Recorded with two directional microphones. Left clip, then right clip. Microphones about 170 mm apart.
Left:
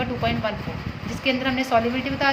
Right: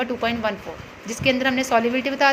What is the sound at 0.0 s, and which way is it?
A woman's voice, 45° right (ahead or behind).